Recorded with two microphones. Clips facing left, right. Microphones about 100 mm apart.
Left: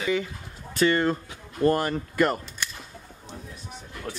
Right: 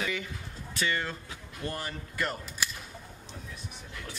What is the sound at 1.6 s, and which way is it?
Speech, 60° left (ahead or behind).